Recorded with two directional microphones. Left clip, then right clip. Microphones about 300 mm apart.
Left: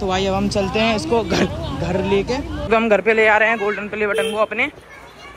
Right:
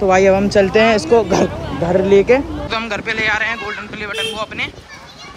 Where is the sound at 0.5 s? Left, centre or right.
Centre.